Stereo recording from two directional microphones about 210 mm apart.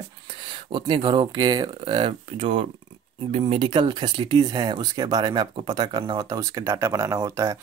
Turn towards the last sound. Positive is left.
turn(degrees=-15)  # may be behind; listen again after turning